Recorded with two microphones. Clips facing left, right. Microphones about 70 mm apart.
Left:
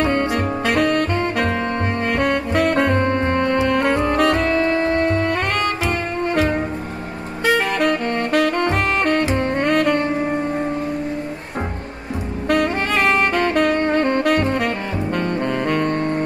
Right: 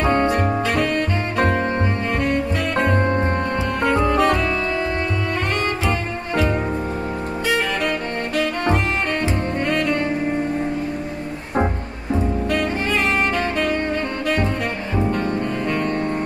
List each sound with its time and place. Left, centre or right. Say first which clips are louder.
0.7 s music: left 3 dB; left
2.0 s saxophone: left 4 dB; left
3.6 s music: left 2 dB; left
7.4 s saxophone: left 5 dB; left
9.3 s bowed string instrument: left 3 dB; left
12.4 s saxophone: left 3 dB; left